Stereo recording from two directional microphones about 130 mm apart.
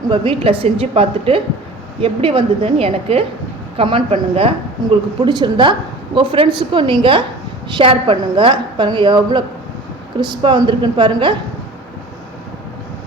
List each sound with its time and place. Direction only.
0.1 s a woman's voice: 45° right (ahead or behind)